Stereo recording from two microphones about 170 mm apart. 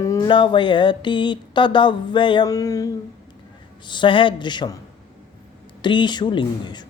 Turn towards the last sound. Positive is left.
turn(degrees=25)  # may be behind; listen again after turning